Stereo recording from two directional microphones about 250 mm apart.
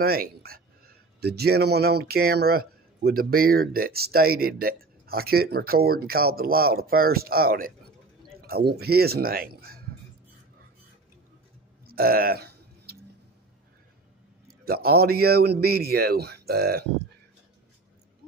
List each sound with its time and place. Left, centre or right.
0.0 s speech: right
11.8 s a sound: right
14.6 s speech: right